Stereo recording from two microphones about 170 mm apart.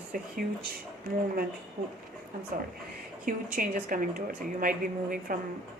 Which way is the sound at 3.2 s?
55° right (ahead or behind).